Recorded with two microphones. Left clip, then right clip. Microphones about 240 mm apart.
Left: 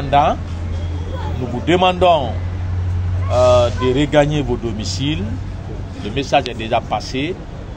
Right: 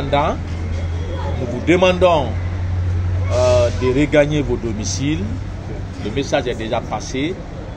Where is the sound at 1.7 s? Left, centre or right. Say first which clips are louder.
Left 1 dB; left.